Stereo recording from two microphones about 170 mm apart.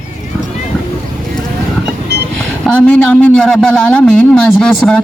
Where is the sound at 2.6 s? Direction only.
5° left (ahead or behind).